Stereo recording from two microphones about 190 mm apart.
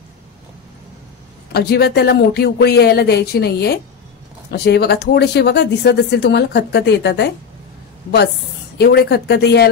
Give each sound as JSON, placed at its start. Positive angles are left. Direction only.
{"t": 1.5, "sound": "speech", "side_deg": 60}
{"t": 8.7, "sound": "speech", "side_deg": 60}